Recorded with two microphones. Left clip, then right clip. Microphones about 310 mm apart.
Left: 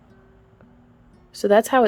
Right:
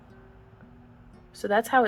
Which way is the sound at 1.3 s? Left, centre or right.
Left.